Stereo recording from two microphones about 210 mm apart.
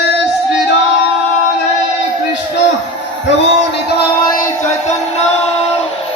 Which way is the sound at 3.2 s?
55° left (ahead or behind).